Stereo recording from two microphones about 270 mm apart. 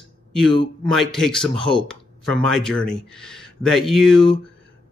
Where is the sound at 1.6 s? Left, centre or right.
Centre.